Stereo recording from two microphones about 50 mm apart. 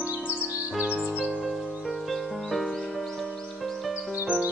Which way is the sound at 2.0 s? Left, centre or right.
Centre.